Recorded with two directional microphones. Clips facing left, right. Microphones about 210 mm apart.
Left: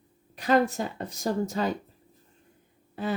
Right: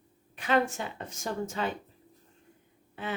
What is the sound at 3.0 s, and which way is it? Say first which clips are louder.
Speech: left 6 dB; 35° left (ahead or behind).